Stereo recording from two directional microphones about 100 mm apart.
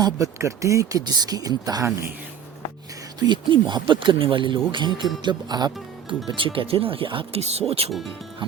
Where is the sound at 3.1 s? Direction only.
50° right (ahead or behind); by 7.9 s 85° right.